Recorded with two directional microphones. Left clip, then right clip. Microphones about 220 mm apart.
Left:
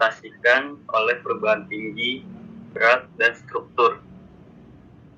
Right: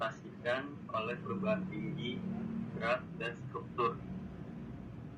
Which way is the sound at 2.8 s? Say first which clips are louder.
Left 18 dB; 35° left (ahead or behind).